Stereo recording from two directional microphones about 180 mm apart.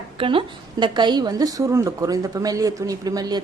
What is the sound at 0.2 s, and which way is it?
A woman's voice, 30° right (ahead or behind).